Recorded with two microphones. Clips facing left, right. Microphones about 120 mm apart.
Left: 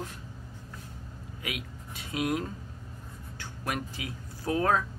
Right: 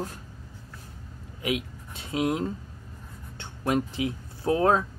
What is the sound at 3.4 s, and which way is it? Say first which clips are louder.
Speech: right 8 dB; 25° right (ahead or behind).